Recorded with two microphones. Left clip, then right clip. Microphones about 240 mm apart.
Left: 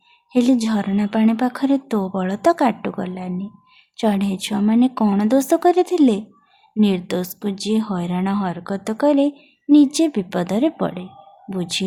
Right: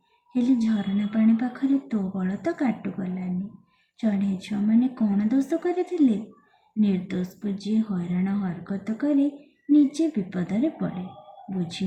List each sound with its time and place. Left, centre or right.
0.3 s a woman's voice: left